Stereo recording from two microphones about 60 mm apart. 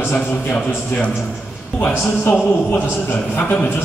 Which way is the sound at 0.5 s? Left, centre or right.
Centre.